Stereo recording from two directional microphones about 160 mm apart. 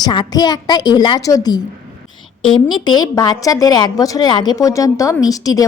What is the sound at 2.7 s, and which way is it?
A woman's voice, 25° left (ahead or behind).